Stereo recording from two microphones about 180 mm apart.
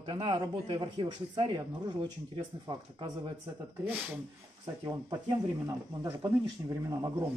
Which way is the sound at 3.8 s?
10° right (ahead or behind).